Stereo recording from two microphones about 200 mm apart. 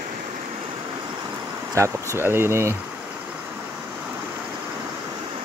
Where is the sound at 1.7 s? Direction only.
15° right (ahead or behind).